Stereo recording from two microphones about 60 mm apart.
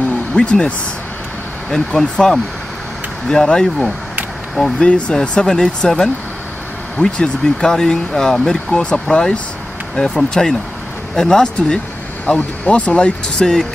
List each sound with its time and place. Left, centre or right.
0.0 s a sound: centre
1.7 s speech: centre
4.8 s speech: centre
12.3 s speech: left